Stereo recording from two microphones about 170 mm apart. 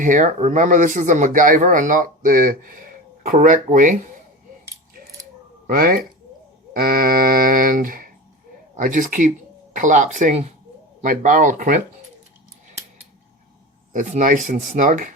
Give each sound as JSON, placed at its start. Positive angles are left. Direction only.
{"t": 0.0, "sound": "speech", "side_deg": -50}
{"t": 5.6, "sound": "a sound", "side_deg": -55}
{"t": 8.7, "sound": "speech", "side_deg": -50}
{"t": 13.9, "sound": "speech", "side_deg": -50}